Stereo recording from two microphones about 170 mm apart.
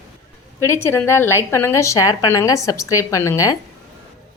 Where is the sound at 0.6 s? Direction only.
15° left (ahead or behind).